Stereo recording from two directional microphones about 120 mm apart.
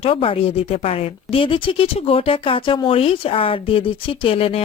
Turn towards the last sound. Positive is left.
turn(degrees=50)  # may be behind; listen again after turning